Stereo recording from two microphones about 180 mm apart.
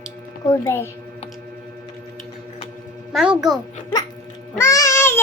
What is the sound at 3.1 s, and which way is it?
Speech, 5° right (ahead or behind).